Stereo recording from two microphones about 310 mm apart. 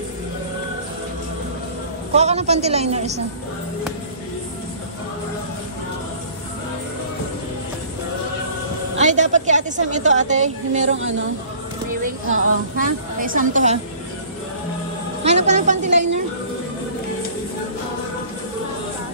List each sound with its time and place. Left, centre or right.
2.1 s a woman's voice: right
8.9 s a woman's voice: right
12.3 s speech: right
13.2 s a woman's voice: right
15.2 s a woman's voice: right